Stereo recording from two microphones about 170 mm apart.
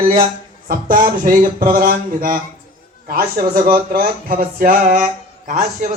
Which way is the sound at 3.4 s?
60° right (ahead or behind).